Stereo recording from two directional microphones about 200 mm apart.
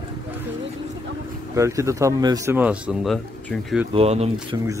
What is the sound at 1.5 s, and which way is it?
Speech, 15° right (ahead or behind).